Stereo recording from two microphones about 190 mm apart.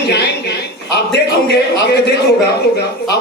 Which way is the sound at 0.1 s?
60° left (ahead or behind).